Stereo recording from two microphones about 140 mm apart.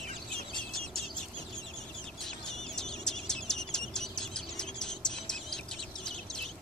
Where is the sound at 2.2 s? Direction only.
5° left (ahead or behind).